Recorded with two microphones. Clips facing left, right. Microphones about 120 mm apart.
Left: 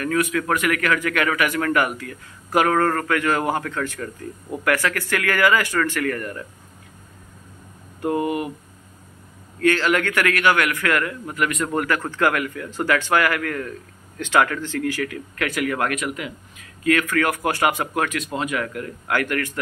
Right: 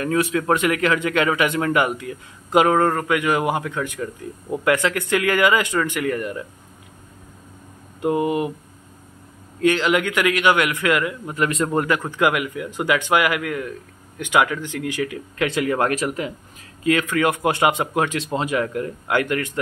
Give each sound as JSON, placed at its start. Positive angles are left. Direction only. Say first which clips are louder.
{"t": 0.0, "sound": "a man's voice", "louder": "right 1 dB", "side_deg": -25}
{"t": 8.0, "sound": "a man's voice", "louder": "right 2 dB", "side_deg": -20}
{"t": 9.6, "sound": "a man's voice", "louder": "right 1 dB", "side_deg": -15}
{"t": 11.3, "sound": "a man's voice", "louder": "right 2 dB", "side_deg": -30}
{"t": 12.0, "sound": "a man's voice", "louder": "right 1 dB", "side_deg": -15}
{"t": 16.8, "sound": "a man's voice", "louder": "right 1 dB", "side_deg": -20}